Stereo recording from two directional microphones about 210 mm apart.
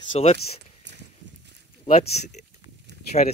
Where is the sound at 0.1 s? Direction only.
30° left (ahead or behind).